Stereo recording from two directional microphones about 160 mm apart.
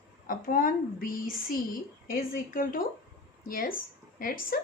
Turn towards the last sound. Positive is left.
turn(degrees=65)  # may be behind; listen again after turning